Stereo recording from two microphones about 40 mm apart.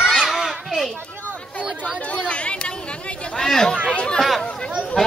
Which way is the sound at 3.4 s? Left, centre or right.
Centre.